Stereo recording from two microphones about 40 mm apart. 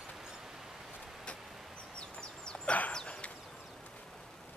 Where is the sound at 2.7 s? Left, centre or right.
Left.